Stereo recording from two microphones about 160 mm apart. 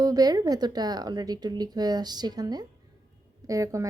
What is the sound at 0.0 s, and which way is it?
A woman's voice, 25° right (ahead or behind).